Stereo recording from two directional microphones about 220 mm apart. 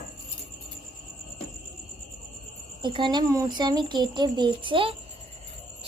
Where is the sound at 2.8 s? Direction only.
20° right (ahead or behind).